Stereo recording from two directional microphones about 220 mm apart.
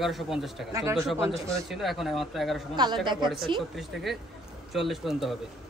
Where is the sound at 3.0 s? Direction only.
20° right (ahead or behind).